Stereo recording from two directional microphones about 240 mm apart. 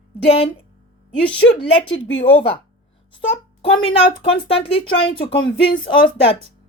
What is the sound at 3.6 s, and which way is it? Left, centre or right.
Speech, left.